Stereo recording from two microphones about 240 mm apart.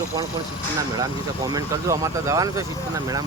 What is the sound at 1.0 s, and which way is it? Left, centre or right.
Speech, centre.